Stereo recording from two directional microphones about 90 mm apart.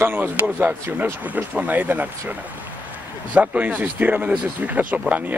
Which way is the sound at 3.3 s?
15° right (ahead or behind).